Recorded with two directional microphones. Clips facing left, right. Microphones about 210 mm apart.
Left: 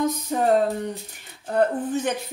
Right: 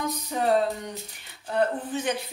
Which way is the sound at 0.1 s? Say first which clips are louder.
Left 3 dB; 50° left (ahead or behind).